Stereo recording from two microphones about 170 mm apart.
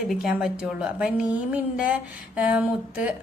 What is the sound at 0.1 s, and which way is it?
Speech, 5° right (ahead or behind).